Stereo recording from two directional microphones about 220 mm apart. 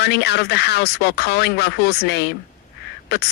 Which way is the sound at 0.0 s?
50° left (ahead or behind).